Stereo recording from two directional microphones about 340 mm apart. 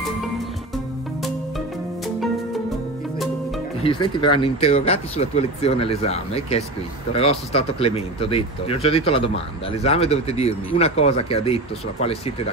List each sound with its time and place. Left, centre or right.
3.8 s speech: centre